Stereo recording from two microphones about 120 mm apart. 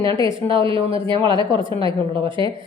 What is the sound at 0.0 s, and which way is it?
A woman's voice, 45° right (ahead or behind).